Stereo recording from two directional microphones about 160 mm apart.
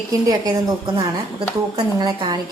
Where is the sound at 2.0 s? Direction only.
25° right (ahead or behind).